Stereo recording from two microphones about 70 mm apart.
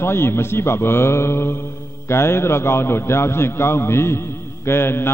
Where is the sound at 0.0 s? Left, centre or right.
Left.